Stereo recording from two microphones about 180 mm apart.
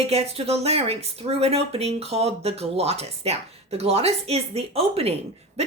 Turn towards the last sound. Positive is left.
turn(degrees=-35)  # may be behind; listen again after turning